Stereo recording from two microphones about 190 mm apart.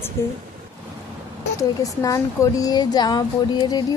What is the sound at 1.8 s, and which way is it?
Speech, 15° left (ahead or behind).